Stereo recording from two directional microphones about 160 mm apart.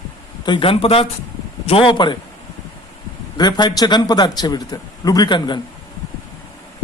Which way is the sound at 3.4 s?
25° left (ahead or behind).